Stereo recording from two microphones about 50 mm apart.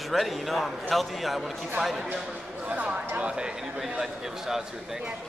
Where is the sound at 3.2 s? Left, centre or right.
Right.